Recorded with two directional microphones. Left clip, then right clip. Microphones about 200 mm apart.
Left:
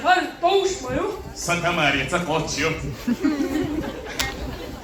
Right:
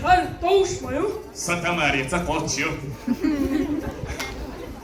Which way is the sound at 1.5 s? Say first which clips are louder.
Left 2 dB; 20° right (ahead or behind).